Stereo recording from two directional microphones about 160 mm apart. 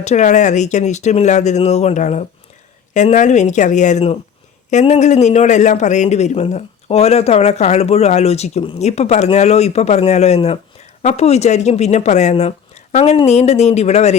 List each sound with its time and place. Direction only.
0.0 s a man's voice: 45° left (ahead or behind)